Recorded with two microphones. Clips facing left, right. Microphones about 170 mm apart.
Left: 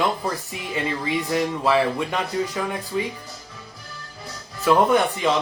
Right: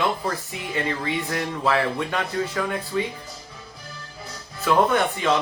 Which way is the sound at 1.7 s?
15° left (ahead or behind).